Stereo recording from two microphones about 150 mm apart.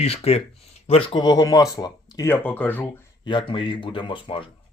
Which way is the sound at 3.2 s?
35° left (ahead or behind).